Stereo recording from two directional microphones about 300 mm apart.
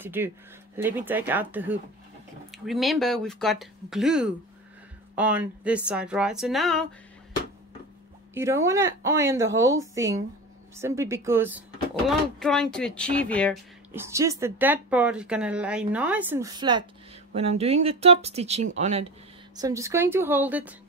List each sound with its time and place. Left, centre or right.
0.0 s speech: centre
8.4 s speech: centre
13.9 s speech: centre
19.5 s speech: centre